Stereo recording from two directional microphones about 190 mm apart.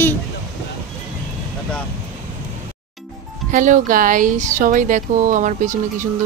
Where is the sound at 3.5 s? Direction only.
40° right (ahead or behind).